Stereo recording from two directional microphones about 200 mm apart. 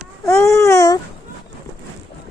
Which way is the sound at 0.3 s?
15° left (ahead or behind).